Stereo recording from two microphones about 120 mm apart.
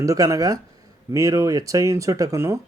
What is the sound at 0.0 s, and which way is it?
Speech, 25° right (ahead or behind).